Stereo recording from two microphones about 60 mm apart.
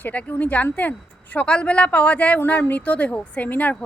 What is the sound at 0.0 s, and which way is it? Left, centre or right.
A woman's voice, left.